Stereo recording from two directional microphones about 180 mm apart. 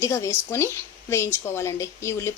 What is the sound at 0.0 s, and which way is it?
A woman's voice, 15° left (ahead or behind).